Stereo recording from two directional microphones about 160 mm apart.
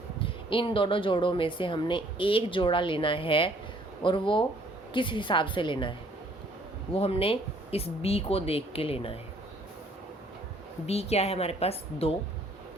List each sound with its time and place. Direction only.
0.2 s speech: 30° left (ahead or behind)
6.9 s speech: 35° left (ahead or behind)
10.8 s speech: 40° left (ahead or behind)